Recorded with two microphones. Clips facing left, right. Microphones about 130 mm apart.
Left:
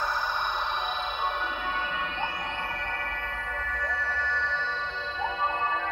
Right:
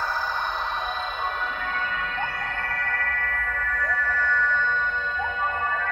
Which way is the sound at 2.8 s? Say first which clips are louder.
Right 4 dB; 25° left (ahead or behind).